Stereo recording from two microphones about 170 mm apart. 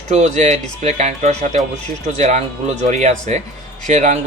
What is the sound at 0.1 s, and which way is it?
A man's voice, 45° right (ahead or behind).